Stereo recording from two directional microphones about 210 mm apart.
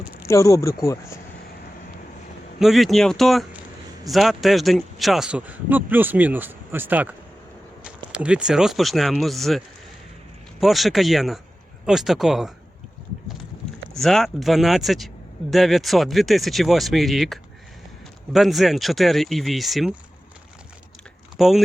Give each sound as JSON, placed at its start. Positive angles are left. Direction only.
{"t": 0.3, "sound": "speech", "side_deg": 15}
{"t": 2.6, "sound": "speech", "side_deg": 0}
{"t": 14.0, "sound": "speech", "side_deg": 0}
{"t": 21.3, "sound": "speech", "side_deg": 0}